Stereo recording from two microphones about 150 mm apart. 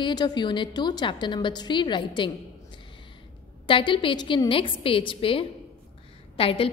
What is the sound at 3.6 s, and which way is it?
A woman's voice, 35° left (ahead or behind).